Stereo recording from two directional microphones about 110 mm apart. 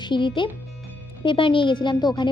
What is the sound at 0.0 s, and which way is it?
Speech, 45° left (ahead or behind).